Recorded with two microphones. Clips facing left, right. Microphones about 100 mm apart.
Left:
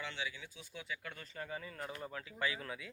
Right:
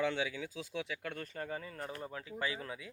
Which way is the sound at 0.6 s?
90° right.